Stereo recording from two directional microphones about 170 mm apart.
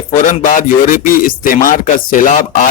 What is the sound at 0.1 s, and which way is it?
Speech, 50° left (ahead or behind).